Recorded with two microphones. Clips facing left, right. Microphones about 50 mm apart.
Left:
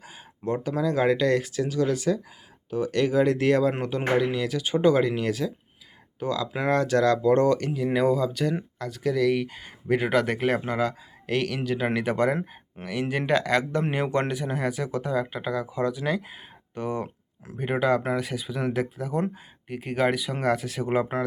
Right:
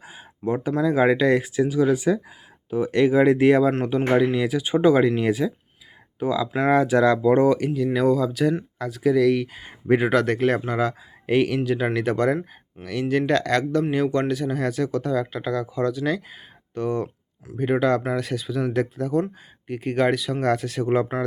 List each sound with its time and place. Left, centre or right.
0.0 s a sound: centre
0.8 s speech: centre
6.7 s speech: centre
7.9 s speech: centre
11.3 s speech: centre
11.9 s speech: centre
13.9 s speech: left